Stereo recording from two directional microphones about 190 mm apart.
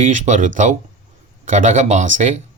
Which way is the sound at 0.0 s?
40° right (ahead or behind).